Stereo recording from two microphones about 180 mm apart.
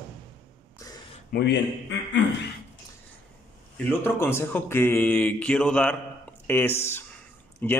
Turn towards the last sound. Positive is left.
turn(degrees=10)  # may be behind; listen again after turning